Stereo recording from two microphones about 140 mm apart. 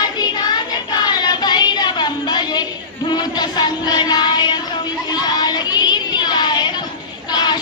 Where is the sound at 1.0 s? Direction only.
30° left (ahead or behind).